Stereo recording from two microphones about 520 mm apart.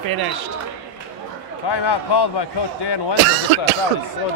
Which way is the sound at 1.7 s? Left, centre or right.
Left.